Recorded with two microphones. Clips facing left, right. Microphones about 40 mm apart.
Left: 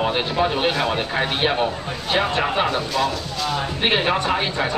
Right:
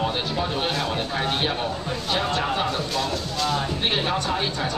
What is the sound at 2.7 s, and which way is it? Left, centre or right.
Speech, centre.